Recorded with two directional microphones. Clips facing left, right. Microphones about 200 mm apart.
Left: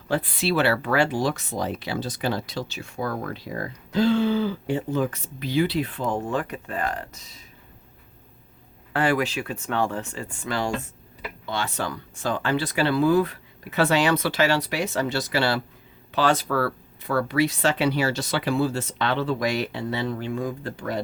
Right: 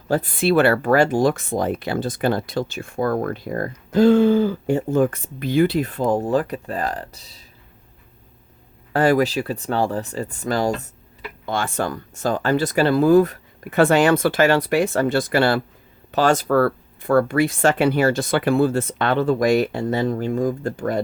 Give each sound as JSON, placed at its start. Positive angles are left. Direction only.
{"t": 0.1, "sound": "speech", "side_deg": -50}
{"t": 8.9, "sound": "speech", "side_deg": -40}